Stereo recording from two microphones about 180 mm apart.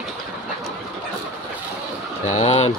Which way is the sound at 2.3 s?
40° left (ahead or behind).